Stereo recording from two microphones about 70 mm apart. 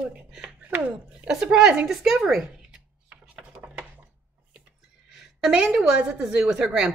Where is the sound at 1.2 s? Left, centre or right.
Centre.